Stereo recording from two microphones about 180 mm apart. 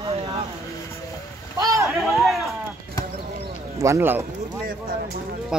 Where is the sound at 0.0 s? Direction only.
35° right (ahead or behind).